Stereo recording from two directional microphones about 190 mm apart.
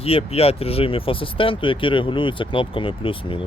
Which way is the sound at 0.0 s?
30° left (ahead or behind).